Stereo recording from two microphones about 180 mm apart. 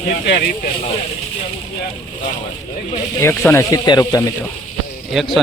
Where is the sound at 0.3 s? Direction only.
65° left (ahead or behind).